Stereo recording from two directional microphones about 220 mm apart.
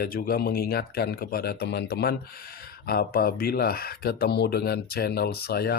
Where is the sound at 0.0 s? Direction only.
45° left (ahead or behind).